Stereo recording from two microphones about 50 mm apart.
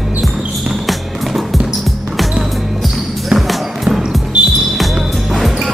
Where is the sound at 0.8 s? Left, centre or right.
Centre.